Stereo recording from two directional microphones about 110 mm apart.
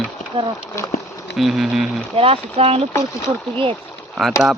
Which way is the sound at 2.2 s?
60° right (ahead or behind).